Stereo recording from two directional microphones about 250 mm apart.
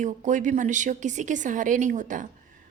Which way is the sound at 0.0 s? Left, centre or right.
Right.